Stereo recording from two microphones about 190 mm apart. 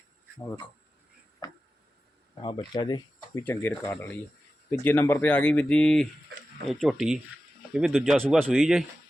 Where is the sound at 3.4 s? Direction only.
10° left (ahead or behind).